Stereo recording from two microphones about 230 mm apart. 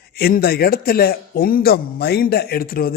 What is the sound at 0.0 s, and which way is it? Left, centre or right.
Speech, left.